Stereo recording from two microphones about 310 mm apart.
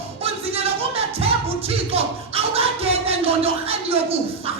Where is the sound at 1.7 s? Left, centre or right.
Centre.